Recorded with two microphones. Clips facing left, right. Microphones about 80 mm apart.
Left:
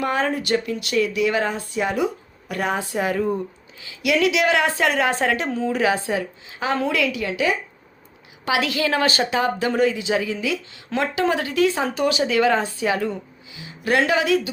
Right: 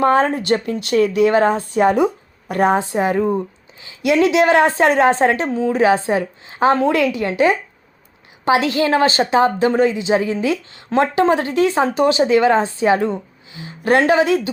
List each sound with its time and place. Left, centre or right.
0.0 s a woman's voice: right